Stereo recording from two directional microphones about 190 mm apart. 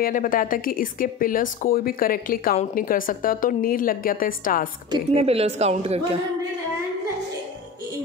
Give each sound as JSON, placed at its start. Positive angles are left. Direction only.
{"t": 0.0, "sound": "a woman's voice", "side_deg": 45}
{"t": 4.9, "sound": "a woman's voice", "side_deg": -30}